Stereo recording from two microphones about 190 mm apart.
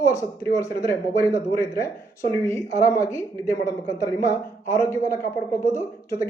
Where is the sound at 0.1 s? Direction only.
15° left (ahead or behind).